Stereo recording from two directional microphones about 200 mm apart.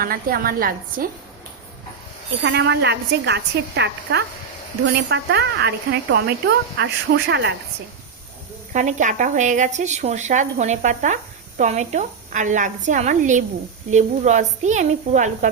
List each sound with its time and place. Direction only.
0.0 s a woman's voice: 45° right (ahead or behind)
2.4 s a woman's voice: 60° right (ahead or behind)
8.7 s speech: 40° right (ahead or behind)